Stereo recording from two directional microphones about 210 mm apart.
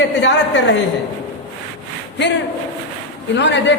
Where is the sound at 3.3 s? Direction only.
60° left (ahead or behind).